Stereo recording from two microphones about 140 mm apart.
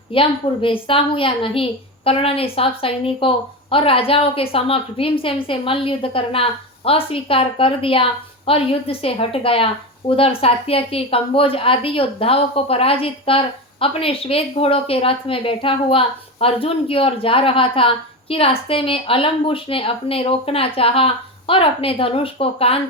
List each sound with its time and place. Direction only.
0.1 s a woman's voice: 40° left (ahead or behind)